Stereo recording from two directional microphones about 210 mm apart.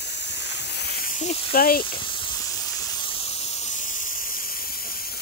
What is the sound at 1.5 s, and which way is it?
Speech, 45° left (ahead or behind).